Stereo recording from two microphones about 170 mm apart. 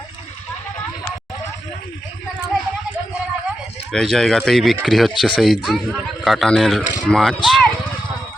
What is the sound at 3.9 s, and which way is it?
A man's voice, centre (ahead or behind).